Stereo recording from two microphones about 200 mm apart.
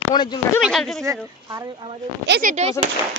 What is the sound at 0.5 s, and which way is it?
Speech, centre (ahead or behind).